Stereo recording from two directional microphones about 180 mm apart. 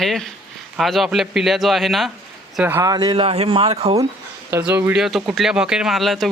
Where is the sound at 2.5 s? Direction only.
10° right (ahead or behind); by 4.0 s 35° right (ahead or behind).